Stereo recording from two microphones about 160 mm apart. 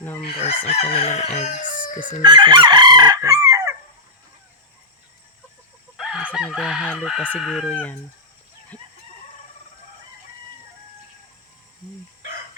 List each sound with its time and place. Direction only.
0.3 s crowing: 40° left (ahead or behind)
1.6 s chicken: 55° left (ahead or behind)
2.2 s chicken: 30° right (ahead or behind)
3.4 s fowl: 20° right (ahead or behind)
6.0 s chicken: centre (ahead or behind)
6.8 s speech: 10° left (ahead or behind)
7.7 s speech: 10° left (ahead or behind)